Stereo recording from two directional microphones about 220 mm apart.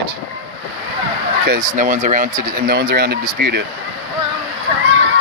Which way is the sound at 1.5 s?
35° right (ahead or behind).